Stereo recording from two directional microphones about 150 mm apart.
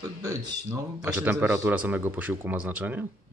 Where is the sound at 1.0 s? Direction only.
10° right (ahead or behind).